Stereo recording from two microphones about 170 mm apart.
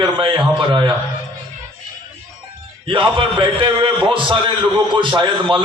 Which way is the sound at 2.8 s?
30° right (ahead or behind).